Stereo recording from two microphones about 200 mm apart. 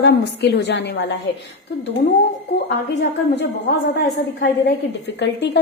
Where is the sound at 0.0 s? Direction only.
60° left (ahead or behind).